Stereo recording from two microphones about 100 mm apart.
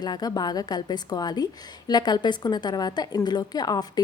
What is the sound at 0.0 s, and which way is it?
A woman's voice, 40° left (ahead or behind).